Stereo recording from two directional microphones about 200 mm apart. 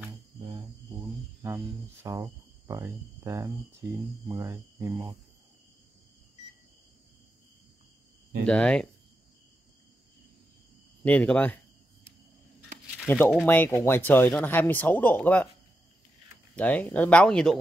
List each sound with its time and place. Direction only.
2.0 s cricket: 15° right (ahead or behind)
2.6 s speech: 15° right (ahead or behind)
3.8 s cricket: 15° right (ahead or behind)
8.5 s speech: 5° left (ahead or behind)
11.1 s speech: 5° left (ahead or behind)
13.0 s speech: 10° left (ahead or behind)
16.5 s speech: 5° left (ahead or behind)